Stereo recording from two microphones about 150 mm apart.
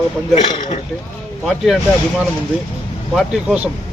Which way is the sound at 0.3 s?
30° left (ahead or behind).